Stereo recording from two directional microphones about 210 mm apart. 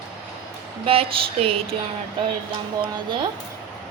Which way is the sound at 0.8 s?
25° right (ahead or behind).